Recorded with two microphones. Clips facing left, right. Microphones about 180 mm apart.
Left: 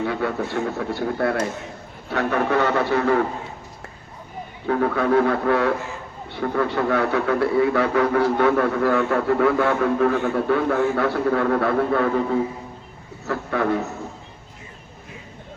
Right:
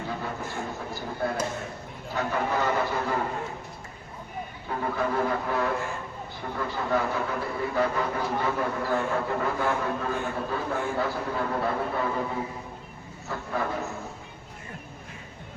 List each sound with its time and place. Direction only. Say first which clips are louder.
0.0 s a man's voice: left 9 dB; 75° left (ahead or behind)
4.6 s a man's voice: left 9 dB; 80° left
13.2 s a man's voice: left 8 dB; 70° left (ahead or behind)